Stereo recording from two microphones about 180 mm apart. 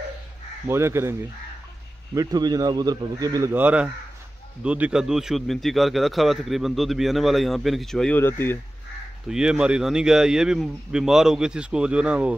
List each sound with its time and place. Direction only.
0.7 s speech: 15° right (ahead or behind)
2.1 s speech: 20° right (ahead or behind); by 8.5 s 10° left (ahead or behind)
9.3 s speech: 5° right (ahead or behind)